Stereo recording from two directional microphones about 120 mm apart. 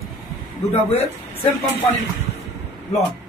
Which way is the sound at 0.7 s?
55° left (ahead or behind).